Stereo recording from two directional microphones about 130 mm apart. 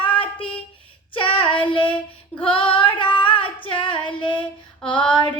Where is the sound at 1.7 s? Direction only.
10° left (ahead or behind).